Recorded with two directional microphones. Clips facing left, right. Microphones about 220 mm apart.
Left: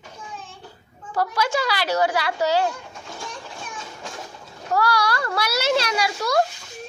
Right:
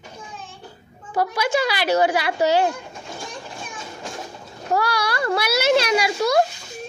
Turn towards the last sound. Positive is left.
turn(degrees=-20)  # may be behind; listen again after turning